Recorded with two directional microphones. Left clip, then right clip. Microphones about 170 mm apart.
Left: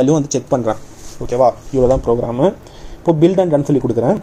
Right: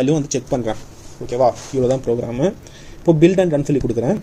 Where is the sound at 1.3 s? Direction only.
45° left (ahead or behind).